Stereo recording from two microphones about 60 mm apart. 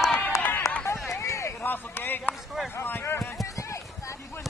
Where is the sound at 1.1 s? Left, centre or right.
Left.